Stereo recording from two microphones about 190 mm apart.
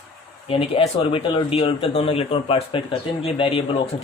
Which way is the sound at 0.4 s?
30° left (ahead or behind).